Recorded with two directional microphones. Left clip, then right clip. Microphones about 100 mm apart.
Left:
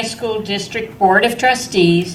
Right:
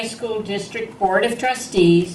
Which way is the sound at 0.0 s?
25° right (ahead or behind).